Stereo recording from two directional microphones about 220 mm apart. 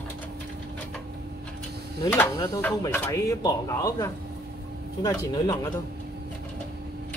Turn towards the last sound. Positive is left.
turn(degrees=15)  # may be behind; listen again after turning